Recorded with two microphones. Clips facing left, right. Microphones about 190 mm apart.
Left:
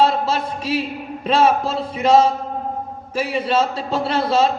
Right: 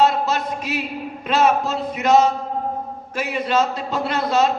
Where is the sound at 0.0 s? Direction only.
30° left (ahead or behind).